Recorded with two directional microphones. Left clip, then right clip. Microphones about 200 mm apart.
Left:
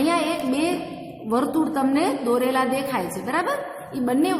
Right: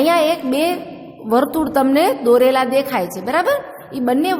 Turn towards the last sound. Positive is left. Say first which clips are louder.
# right 5 dB
turn(degrees=-45)  # may be behind; listen again after turning